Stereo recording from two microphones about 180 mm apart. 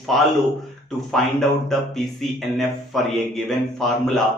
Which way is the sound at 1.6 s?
Centre (ahead or behind).